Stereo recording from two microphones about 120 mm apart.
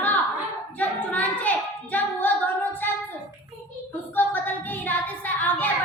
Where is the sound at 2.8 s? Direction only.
15° left (ahead or behind).